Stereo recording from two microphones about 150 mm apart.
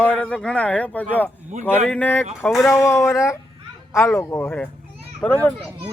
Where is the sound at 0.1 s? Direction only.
5° left (ahead or behind).